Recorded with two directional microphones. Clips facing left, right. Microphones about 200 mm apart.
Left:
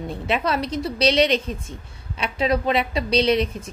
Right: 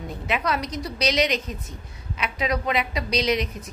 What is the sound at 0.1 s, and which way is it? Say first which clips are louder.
A woman's voice: left 2 dB; 30° left (ahead or behind).